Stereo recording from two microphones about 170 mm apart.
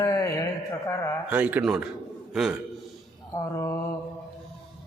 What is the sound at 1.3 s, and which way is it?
A man's voice, 10° right (ahead or behind).